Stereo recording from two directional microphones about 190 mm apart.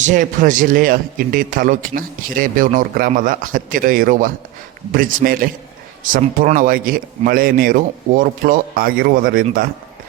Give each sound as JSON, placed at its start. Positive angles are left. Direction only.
{"t": 0.0, "sound": "a man's voice", "side_deg": -40}